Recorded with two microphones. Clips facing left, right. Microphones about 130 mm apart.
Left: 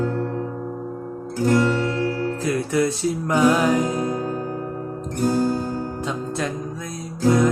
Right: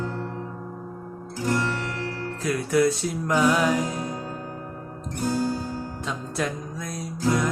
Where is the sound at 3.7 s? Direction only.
55° left (ahead or behind).